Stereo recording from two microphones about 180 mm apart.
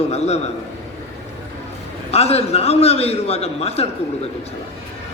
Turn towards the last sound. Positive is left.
turn(degrees=35)  # may be behind; listen again after turning